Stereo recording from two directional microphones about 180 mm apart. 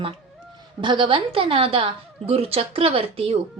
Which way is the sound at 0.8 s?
25° right (ahead or behind).